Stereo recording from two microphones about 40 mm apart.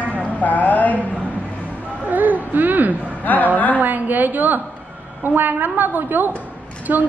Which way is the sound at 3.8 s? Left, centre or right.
Right.